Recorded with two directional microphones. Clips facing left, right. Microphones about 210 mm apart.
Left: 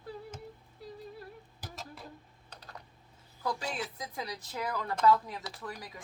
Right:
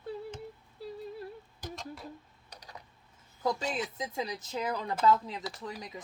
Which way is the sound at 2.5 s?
10° right (ahead or behind).